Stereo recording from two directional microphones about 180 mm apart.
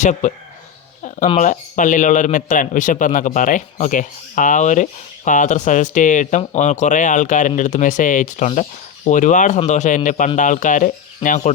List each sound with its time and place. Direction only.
0.0 s a man's voice: 45° left (ahead or behind)
1.4 s a man's voice: 45° left (ahead or behind)